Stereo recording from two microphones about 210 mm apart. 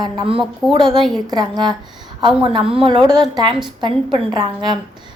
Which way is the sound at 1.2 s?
20° right (ahead or behind).